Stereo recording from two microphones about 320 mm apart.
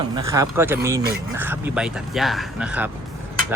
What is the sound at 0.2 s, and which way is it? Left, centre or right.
Speech, centre.